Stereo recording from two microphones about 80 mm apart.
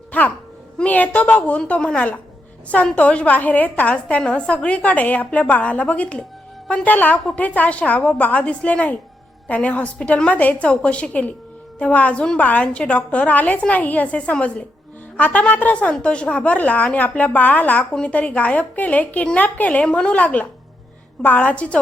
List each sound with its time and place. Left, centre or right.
0.1 s a child's voice: centre